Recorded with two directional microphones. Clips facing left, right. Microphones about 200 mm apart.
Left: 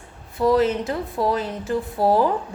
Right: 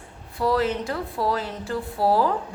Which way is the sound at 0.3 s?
20° left (ahead or behind).